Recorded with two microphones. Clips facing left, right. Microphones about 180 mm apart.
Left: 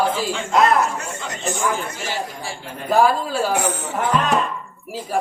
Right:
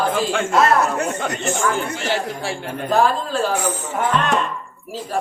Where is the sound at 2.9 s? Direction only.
10° left (ahead or behind).